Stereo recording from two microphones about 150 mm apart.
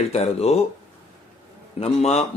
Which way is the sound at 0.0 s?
45° left (ahead or behind).